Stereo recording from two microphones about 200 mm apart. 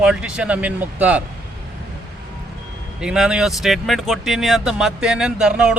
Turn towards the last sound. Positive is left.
turn(degrees=-5)  # may be behind; listen again after turning